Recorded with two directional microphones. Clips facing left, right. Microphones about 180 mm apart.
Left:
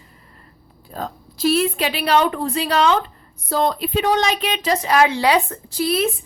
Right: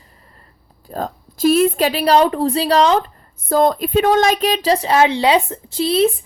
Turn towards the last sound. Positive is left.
turn(degrees=-30)  # may be behind; listen again after turning